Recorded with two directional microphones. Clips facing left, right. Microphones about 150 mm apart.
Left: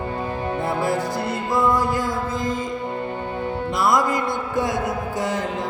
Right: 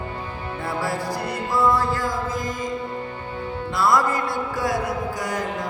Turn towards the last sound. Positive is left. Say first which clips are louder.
# left 2 dB
turn(degrees=25)  # may be behind; listen again after turning